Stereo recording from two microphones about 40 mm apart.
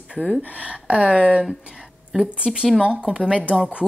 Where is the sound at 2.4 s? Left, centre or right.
Right.